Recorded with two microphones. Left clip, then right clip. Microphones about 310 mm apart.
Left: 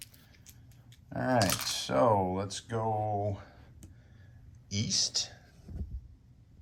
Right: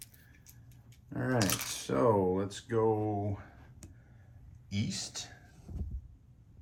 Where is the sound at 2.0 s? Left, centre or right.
Centre.